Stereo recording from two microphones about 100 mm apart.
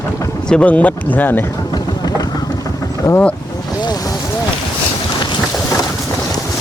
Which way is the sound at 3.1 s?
30° left (ahead or behind).